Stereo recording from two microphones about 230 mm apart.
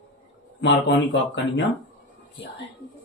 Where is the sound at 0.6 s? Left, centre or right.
Left.